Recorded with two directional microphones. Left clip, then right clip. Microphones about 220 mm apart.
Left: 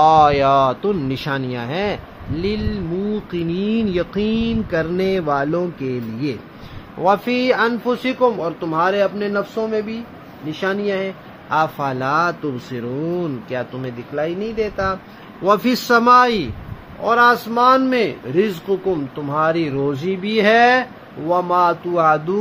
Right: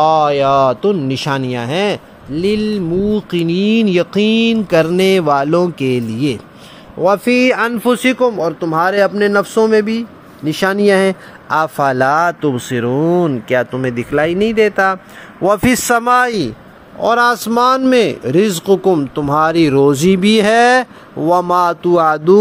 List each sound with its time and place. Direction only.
0.0 s speech: 10° right (ahead or behind); by 6.3 s 35° right (ahead or behind)
7.0 s speech: 25° right (ahead or behind)
16.1 s speech: 25° right (ahead or behind)
17.0 s speech: 45° right (ahead or behind)